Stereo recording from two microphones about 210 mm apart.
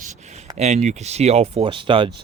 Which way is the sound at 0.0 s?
30° right (ahead or behind).